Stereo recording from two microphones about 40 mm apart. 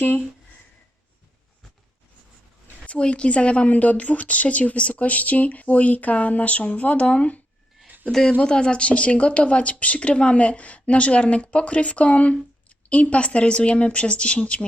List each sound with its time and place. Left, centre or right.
2.8 s a woman's voice: left
7.9 s a sound: right
8.4 s a woman's voice: left